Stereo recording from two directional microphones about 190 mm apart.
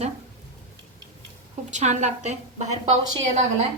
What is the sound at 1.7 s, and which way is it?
A woman's voice, 35° right (ahead or behind).